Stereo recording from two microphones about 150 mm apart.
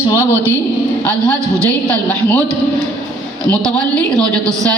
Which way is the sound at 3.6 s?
5° left (ahead or behind).